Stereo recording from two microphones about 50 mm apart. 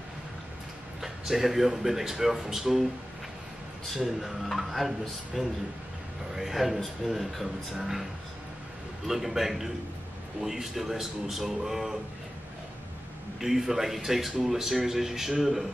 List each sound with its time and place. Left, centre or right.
1.0 s speech: centre
3.8 s a man's voice: centre
13.4 s speech: centre